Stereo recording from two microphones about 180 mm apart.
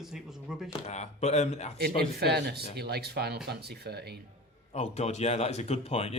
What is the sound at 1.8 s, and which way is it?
Speech, 60° right (ahead or behind).